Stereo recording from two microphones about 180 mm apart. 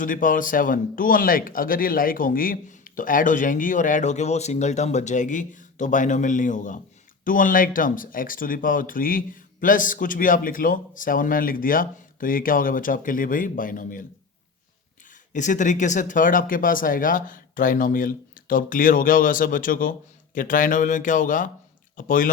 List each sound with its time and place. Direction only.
0.0 s speech: 50° left (ahead or behind)
15.3 s speech: 45° left (ahead or behind)